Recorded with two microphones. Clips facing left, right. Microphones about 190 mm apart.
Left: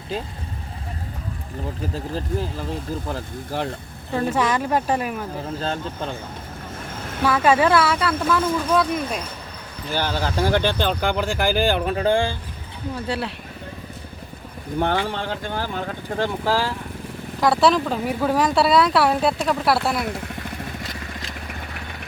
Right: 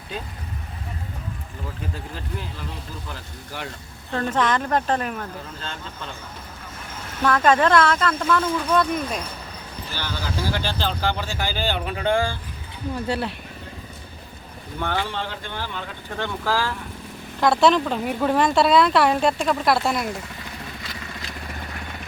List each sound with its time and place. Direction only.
2.1 s speech: 35° left (ahead or behind)
4.1 s speech: 10° left (ahead or behind)
5.5 s speech: 40° left (ahead or behind)
7.3 s speech: 10° left (ahead or behind)
9.9 s speech: 50° left (ahead or behind)
11.9 s speech: 30° left (ahead or behind)
13.1 s speech: centre (ahead or behind)
14.8 s speech: 45° left (ahead or behind)
16.4 s speech: 30° left (ahead or behind)
17.4 s speech: 5° left (ahead or behind)